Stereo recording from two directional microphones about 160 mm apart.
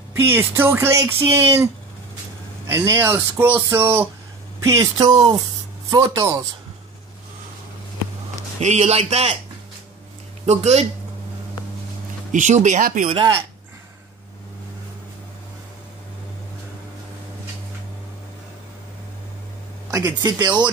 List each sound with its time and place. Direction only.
0.1 s speech: 15° right (ahead or behind)
2.7 s speech: 20° right (ahead or behind)
4.6 s speech: 25° right (ahead or behind)
8.5 s a man's voice: 45° right (ahead or behind)
10.4 s speech: 45° right (ahead or behind)
12.3 s speech: 50° right (ahead or behind)
13.1 s a man's voice: 35° right (ahead or behind)
19.9 s speech: 20° right (ahead or behind)